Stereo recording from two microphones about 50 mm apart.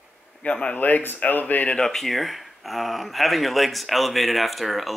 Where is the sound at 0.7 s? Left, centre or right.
Left.